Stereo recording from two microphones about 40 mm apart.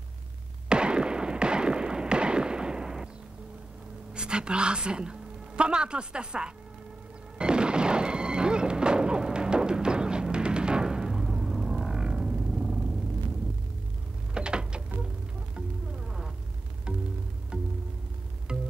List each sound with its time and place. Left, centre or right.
0.7 s a sound: right
4.1 s a woman's voice: right
7.3 s music: right
14.3 s mechanisms: right
18.5 s music: right